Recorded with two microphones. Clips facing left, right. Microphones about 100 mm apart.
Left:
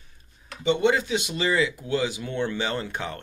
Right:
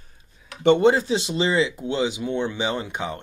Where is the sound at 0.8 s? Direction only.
35° right (ahead or behind); by 3.1 s 15° right (ahead or behind).